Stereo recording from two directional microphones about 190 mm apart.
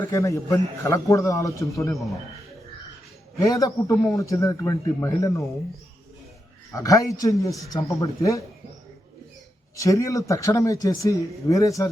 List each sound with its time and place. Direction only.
0.1 s speech: 15° left (ahead or behind)
3.3 s speech: 20° left (ahead or behind)
6.7 s speech: 15° left (ahead or behind)
9.7 s speech: 15° left (ahead or behind)